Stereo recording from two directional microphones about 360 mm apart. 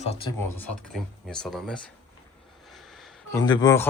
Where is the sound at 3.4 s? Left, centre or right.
Centre.